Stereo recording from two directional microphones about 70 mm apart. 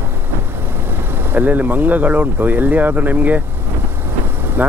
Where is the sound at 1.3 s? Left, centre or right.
Right.